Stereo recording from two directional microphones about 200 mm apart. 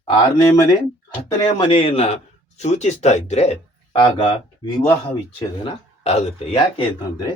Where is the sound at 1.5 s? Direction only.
25° left (ahead or behind).